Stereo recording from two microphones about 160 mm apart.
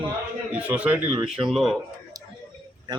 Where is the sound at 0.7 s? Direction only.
10° right (ahead or behind).